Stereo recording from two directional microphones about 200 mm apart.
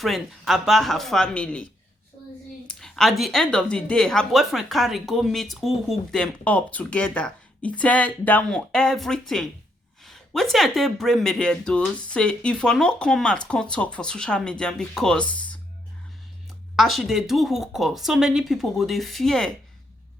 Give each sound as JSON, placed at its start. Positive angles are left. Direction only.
{"t": 0.0, "sound": "a woman's voice", "side_deg": 0}
{"t": 2.6, "sound": "a woman's voice", "side_deg": 0}
{"t": 16.7, "sound": "a woman's voice", "side_deg": 0}